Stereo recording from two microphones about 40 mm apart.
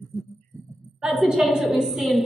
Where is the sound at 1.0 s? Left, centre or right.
Centre.